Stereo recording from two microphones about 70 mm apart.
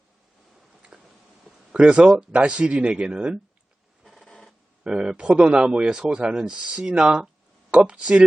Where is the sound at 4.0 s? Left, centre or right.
Centre.